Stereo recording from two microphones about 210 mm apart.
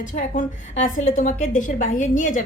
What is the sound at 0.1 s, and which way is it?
A woman's voice, 40° left (ahead or behind).